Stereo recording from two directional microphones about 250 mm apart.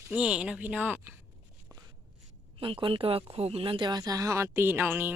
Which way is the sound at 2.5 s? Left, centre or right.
Right.